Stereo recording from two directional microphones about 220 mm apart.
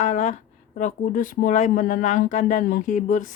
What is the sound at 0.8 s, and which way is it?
Speech, 35° left (ahead or behind).